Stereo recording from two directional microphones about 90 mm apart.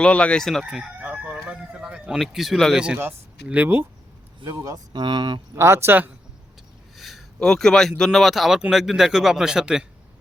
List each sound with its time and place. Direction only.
0.0 s speech: 10° left (ahead or behind)
0.6 s crowing: 10° right (ahead or behind)
1.5 s a sound: 10° right (ahead or behind)
2.2 s speech: 5° right (ahead or behind)
2.7 s a man's voice: 10° right (ahead or behind)
3.0 s speech: 20° right (ahead or behind)
4.4 s speech: 40° right (ahead or behind)
5.0 s speech: 60° right (ahead or behind)
5.5 s speech: 30° right (ahead or behind)
6.9 s a sound: centre (ahead or behind)
7.3 s a man's voice: 5° left (ahead or behind)